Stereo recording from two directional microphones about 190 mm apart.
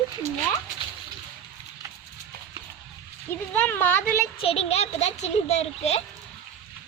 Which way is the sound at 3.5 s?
10° left (ahead or behind).